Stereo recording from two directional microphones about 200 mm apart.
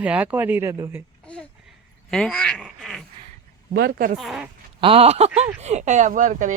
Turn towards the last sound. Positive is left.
turn(degrees=-40)  # may be behind; listen again after turning